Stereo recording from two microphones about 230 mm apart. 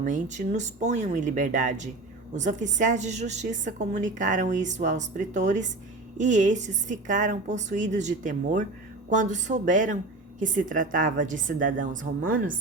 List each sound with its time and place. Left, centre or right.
0.0 s a woman's voice: right